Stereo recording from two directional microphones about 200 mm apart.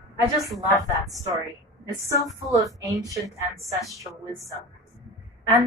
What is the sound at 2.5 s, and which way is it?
Speech, 15° right (ahead or behind).